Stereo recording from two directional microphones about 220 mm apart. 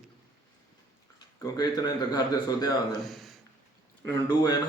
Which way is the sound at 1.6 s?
20° left (ahead or behind).